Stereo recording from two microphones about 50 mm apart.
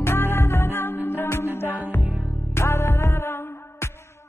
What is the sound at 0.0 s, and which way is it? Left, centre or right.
Music, left.